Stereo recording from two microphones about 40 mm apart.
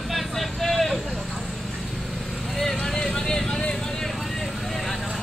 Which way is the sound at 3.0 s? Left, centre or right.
Centre.